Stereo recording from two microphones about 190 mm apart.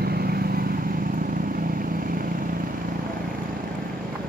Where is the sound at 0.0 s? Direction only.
55° right (ahead or behind).